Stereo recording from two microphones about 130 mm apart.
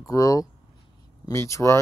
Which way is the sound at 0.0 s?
25° left (ahead or behind).